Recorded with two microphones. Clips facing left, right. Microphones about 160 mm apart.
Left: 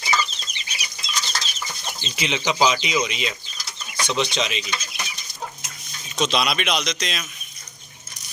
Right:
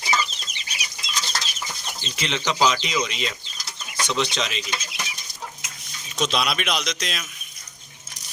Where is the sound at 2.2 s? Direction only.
10° left (ahead or behind).